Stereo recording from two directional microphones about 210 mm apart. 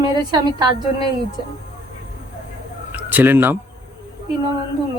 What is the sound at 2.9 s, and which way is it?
Speech, 10° right (ahead or behind).